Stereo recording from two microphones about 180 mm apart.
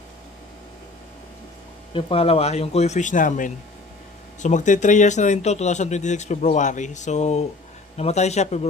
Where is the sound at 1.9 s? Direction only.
30° left (ahead or behind).